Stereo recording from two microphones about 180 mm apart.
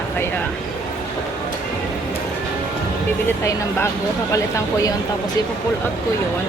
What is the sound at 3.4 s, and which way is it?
Speech, 15° left (ahead or behind).